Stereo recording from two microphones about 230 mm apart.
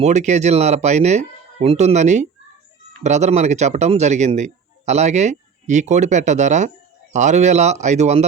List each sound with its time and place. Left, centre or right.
0.0 s speech: right